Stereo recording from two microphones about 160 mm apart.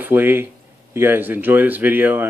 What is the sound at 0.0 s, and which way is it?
Speech, 15° right (ahead or behind).